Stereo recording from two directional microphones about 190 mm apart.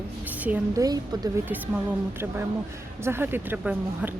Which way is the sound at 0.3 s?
10° right (ahead or behind).